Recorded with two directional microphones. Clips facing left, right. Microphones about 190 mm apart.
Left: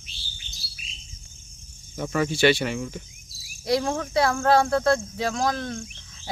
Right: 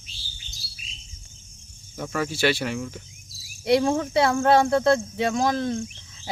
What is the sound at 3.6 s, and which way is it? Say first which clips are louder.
Speech: right 4 dB; 20° right (ahead or behind).